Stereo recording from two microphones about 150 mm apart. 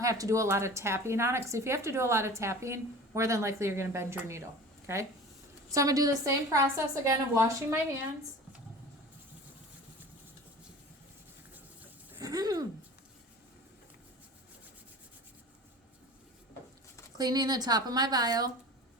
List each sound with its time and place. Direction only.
0.0 s a woman's voice: 20° right (ahead or behind)
5.7 s a woman's voice: 25° right (ahead or behind)
12.1 s a sound: 25° right (ahead or behind)
17.2 s a woman's voice: 25° right (ahead or behind)